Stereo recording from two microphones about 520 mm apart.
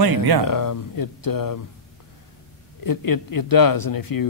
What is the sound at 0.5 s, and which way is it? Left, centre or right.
Speech, left.